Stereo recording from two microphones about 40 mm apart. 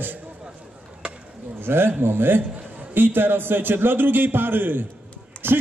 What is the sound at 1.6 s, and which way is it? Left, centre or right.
A man's voice, right.